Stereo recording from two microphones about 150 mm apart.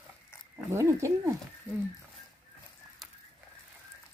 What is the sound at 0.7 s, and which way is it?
Speech, 20° right (ahead or behind).